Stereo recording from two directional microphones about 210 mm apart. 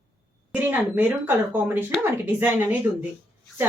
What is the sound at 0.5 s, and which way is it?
Speech, 10° right (ahead or behind).